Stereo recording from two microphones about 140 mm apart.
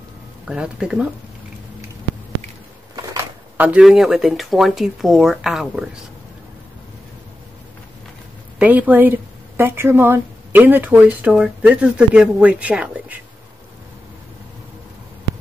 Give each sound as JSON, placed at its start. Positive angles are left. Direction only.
{"t": 0.5, "sound": "speech", "side_deg": -5}
{"t": 3.1, "sound": "speech", "side_deg": -20}
{"t": 8.5, "sound": "a woman's voice", "side_deg": -10}